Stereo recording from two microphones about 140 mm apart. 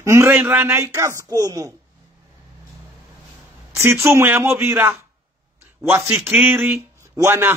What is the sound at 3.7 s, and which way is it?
A man's voice, 20° right (ahead or behind).